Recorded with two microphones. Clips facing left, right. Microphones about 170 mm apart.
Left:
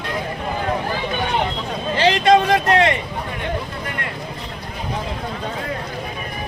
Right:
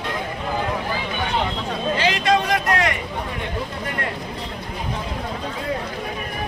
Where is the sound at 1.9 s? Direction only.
30° left (ahead or behind).